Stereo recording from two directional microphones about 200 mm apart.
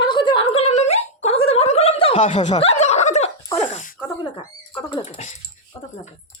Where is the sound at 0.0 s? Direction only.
20° left (ahead or behind).